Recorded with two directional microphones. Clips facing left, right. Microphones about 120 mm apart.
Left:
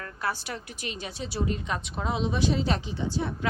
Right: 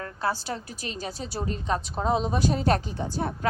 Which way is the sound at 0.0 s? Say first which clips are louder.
Right 3 dB; 30° right (ahead or behind).